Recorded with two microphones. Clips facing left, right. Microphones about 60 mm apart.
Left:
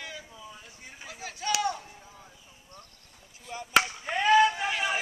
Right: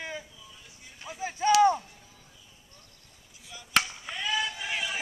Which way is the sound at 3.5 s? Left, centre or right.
Left.